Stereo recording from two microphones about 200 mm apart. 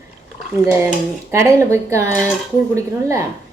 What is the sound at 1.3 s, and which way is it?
A woman's voice, 15° right (ahead or behind).